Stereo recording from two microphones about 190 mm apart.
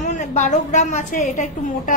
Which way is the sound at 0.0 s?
40° left (ahead or behind).